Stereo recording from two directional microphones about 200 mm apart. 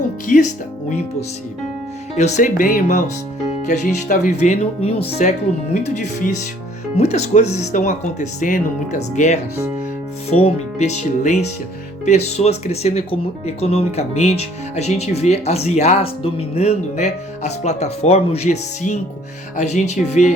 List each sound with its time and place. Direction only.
0.3 s speech: 40° left (ahead or behind)
2.1 s speech: 35° left (ahead or behind)